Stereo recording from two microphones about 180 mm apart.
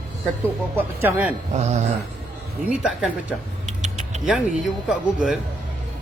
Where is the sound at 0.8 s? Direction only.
10° right (ahead or behind).